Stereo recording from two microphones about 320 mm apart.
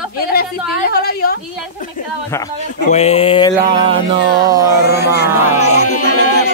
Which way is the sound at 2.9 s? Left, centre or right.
Centre.